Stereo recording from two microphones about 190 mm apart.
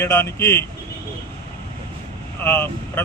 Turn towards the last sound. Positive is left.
turn(degrees=10)  # may be behind; listen again after turning